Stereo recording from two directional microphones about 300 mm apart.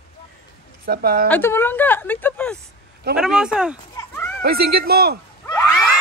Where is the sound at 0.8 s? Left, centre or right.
Right.